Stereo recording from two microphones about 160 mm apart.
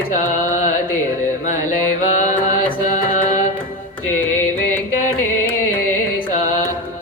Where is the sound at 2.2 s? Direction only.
50° left (ahead or behind).